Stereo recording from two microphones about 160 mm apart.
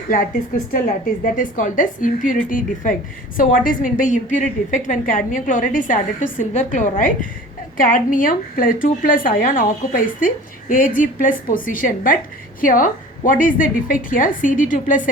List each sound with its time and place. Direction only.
0.7 s a woman's voice: 60° left (ahead or behind)